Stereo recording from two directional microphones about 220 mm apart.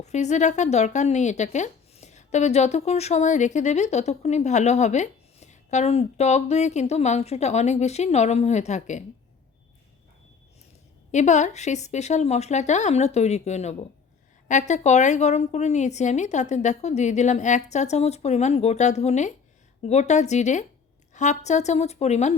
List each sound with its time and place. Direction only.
0.0 s speech: 30° left (ahead or behind)
11.1 s speech: 35° left (ahead or behind)